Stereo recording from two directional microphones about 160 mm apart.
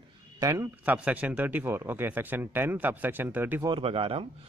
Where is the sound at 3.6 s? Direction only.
35° right (ahead or behind).